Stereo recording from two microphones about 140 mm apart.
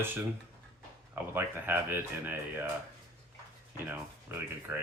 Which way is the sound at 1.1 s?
15° right (ahead or behind).